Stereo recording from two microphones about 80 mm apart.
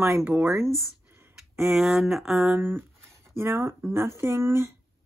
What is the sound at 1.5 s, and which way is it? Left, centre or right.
Speech, centre.